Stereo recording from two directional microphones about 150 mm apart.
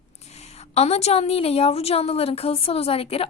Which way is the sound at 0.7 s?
45° left (ahead or behind).